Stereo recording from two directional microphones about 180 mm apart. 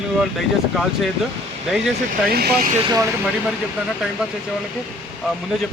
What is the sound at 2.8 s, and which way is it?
Speech, 20° right (ahead or behind).